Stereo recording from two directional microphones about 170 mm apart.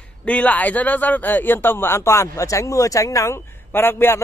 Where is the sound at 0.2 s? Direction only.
10° left (ahead or behind).